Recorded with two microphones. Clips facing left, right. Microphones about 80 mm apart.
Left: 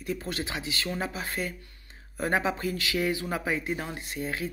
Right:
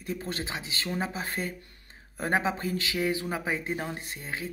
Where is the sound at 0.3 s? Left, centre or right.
Right.